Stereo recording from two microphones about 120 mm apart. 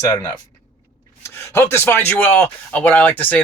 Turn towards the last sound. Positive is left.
turn(degrees=15)  # may be behind; listen again after turning